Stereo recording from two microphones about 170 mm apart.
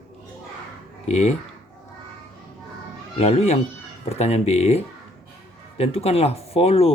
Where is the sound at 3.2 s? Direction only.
40° left (ahead or behind).